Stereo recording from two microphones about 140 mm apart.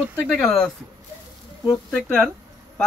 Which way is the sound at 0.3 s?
5° left (ahead or behind).